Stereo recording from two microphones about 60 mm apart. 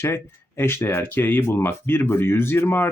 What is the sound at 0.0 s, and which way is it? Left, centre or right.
Speech, left.